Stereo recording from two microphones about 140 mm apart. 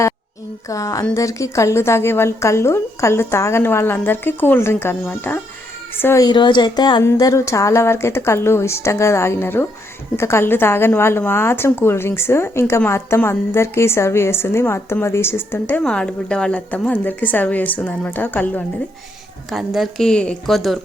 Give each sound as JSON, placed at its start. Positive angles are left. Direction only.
{"t": 0.7, "sound": "a woman's voice", "side_deg": 25}
{"t": 6.2, "sound": "a woman's voice", "side_deg": 35}
{"t": 19.5, "sound": "a woman's voice", "side_deg": 0}